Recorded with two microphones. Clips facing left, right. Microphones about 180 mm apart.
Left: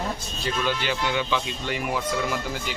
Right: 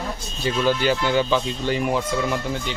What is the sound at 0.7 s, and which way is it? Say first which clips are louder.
Speech: right 8 dB; 40° right (ahead or behind).